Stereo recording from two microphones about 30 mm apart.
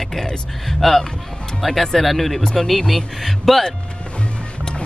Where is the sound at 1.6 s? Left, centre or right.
Centre.